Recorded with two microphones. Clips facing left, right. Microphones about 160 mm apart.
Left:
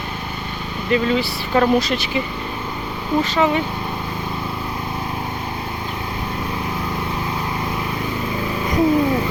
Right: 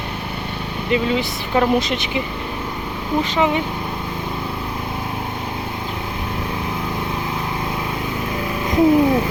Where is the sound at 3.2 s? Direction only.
15° right (ahead or behind).